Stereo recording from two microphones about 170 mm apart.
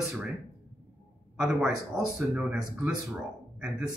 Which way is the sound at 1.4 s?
5° right (ahead or behind).